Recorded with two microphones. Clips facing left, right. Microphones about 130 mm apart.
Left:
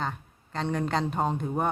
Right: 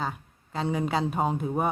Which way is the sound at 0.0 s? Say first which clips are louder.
Right 1 dB; 5° right (ahead or behind).